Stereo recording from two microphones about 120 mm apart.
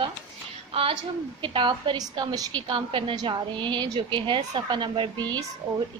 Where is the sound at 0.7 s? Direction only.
50° right (ahead or behind).